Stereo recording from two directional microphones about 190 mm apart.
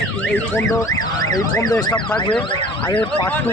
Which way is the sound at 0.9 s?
20° left (ahead or behind).